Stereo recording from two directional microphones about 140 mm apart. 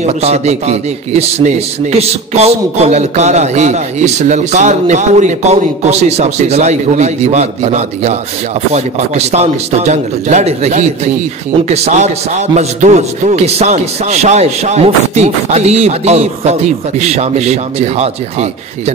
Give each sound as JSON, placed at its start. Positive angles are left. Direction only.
{"t": 0.0, "sound": "a man's voice", "side_deg": -50}